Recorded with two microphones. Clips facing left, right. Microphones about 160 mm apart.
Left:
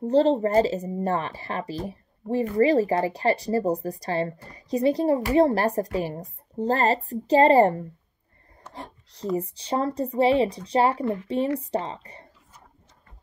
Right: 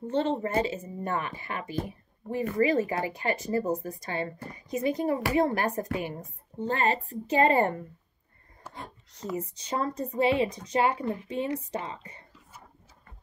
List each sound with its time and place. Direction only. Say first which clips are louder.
0.0 s speech: left 8 dB; 35° left (ahead or behind)
8.7 s a sound: left 4 dB; 35° left (ahead or behind)
9.4 s speech: left 5 dB; 30° left (ahead or behind)